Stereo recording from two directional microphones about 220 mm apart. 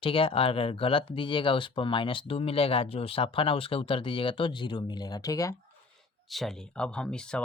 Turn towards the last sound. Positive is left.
turn(degrees=5)  # may be behind; listen again after turning